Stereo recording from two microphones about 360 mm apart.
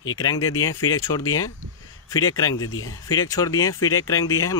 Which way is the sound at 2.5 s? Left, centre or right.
Left.